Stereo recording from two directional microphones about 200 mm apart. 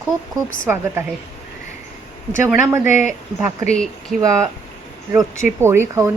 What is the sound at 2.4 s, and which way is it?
Speech, 10° right (ahead or behind).